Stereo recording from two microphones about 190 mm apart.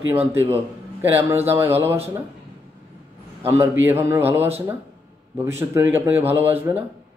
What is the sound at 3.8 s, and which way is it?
Speech, 10° right (ahead or behind).